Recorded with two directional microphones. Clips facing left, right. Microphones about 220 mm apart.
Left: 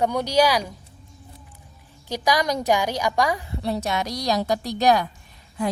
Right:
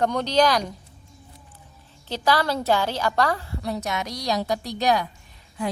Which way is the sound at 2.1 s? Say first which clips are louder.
Even; 15° left (ahead or behind).